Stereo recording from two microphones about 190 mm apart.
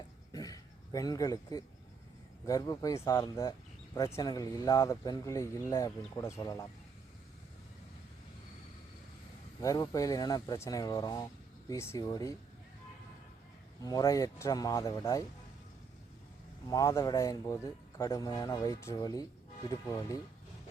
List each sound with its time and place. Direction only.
0.3 s a sound: 20° left (ahead or behind)
2.5 s speech: 20° left (ahead or behind)
9.6 s speech: 20° left (ahead or behind)
13.8 s speech: 20° left (ahead or behind)
16.6 s speech: 20° left (ahead or behind)